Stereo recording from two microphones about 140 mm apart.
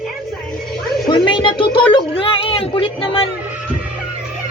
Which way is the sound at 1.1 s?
35° left (ahead or behind).